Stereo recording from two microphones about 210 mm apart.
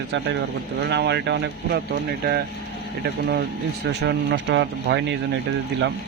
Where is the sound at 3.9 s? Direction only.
55° right (ahead or behind).